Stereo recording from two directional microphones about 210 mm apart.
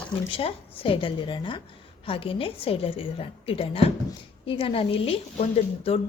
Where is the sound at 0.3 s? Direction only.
25° left (ahead or behind).